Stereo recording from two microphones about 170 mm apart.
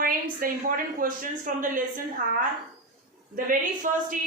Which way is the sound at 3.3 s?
55° right (ahead or behind).